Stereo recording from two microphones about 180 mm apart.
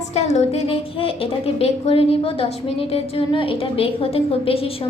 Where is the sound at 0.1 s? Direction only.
40° left (ahead or behind).